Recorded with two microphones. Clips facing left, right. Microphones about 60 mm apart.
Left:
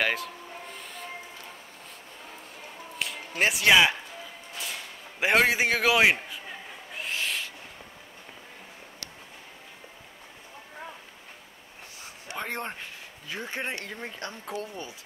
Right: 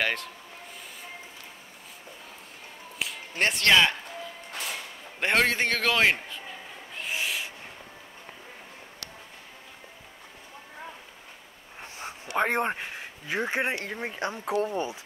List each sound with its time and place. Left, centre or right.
0.0 s speech: centre
3.0 s a sound: centre
4.5 s music: right
5.2 s a man's voice: centre
7.1 s owl: centre
11.8 s a sound: right
13.8 s speech: centre
14.5 s speech: right